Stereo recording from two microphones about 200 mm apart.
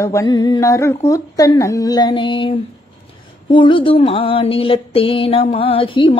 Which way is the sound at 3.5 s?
25° left (ahead or behind).